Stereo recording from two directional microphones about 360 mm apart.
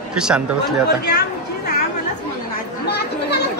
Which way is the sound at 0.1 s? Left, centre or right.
Centre.